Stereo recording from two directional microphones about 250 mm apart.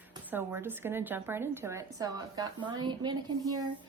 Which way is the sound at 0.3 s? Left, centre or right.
Centre.